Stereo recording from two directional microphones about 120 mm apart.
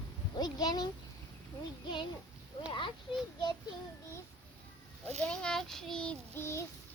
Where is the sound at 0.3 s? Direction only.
35° left (ahead or behind).